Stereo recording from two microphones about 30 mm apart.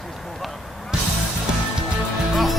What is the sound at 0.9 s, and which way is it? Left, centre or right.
Music, right.